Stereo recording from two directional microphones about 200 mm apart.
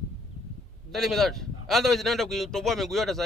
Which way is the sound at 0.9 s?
Centre (ahead or behind).